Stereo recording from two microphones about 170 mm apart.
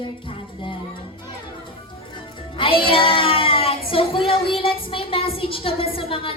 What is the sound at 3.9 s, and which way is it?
A woman's voice, 35° left (ahead or behind).